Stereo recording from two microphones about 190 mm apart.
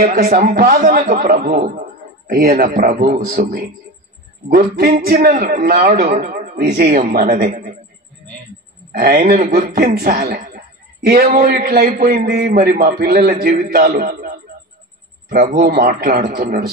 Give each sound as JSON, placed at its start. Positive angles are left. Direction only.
{"t": 0.0, "sound": "a man's voice", "side_deg": -50}
{"t": 8.9, "sound": "a man's voice", "side_deg": -50}
{"t": 15.5, "sound": "a man's voice", "side_deg": -55}